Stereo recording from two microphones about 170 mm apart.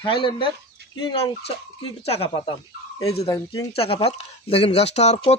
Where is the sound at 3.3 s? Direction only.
20° left (ahead or behind).